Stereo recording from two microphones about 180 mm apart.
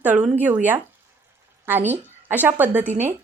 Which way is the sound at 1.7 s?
10° right (ahead or behind).